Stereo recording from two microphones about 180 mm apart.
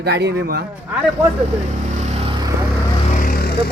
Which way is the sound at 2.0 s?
35° right (ahead or behind).